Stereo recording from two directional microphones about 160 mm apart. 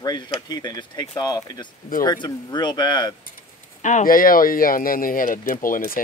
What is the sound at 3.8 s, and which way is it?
Speech, 50° left (ahead or behind).